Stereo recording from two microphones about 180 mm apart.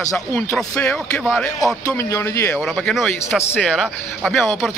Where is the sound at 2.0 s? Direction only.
15° left (ahead or behind).